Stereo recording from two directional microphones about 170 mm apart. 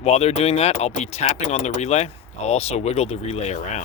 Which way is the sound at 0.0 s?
40° left (ahead or behind).